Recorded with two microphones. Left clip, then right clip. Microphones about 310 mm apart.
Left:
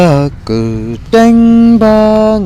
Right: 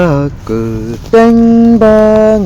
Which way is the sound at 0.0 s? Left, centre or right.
Left.